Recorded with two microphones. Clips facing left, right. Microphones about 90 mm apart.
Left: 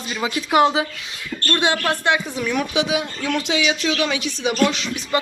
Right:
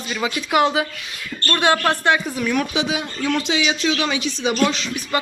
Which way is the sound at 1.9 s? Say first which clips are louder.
Right 1 dB; 15° left (ahead or behind).